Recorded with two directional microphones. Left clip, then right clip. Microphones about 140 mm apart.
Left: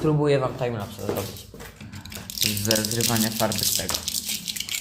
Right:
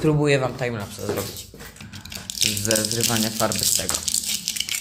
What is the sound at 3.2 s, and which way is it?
Speech, 10° right (ahead or behind).